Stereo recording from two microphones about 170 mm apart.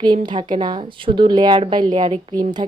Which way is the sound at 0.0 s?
25° right (ahead or behind).